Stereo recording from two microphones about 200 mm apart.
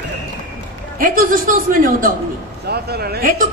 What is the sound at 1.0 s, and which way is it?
A woman's voice, 45° right (ahead or behind).